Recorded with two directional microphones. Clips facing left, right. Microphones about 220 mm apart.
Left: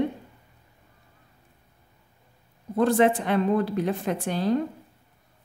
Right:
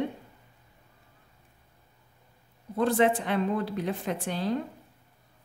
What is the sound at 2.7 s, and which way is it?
A woman's voice, 45° left (ahead or behind).